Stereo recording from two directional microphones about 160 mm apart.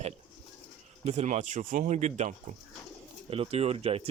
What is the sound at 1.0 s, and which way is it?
Speech, 45° right (ahead or behind).